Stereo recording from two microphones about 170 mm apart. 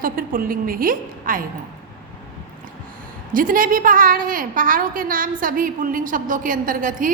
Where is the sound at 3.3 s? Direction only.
55° right (ahead or behind).